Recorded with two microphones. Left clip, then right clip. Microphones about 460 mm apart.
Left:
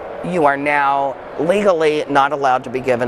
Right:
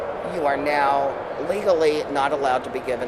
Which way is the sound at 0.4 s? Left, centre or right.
Left.